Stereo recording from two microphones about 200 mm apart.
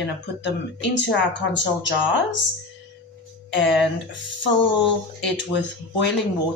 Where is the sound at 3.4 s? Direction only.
65° left (ahead or behind).